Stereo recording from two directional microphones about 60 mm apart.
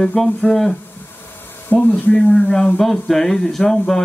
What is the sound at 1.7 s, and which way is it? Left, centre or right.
Speech, left.